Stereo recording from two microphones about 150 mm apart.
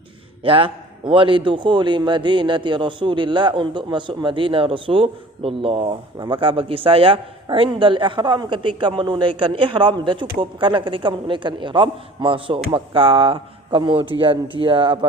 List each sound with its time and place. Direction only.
0.4 s a man's voice: 35° right (ahead or behind)